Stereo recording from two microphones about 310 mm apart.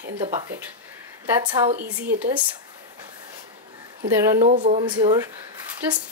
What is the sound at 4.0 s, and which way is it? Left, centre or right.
Speech, right.